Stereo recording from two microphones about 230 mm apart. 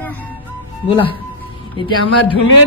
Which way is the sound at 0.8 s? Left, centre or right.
Left.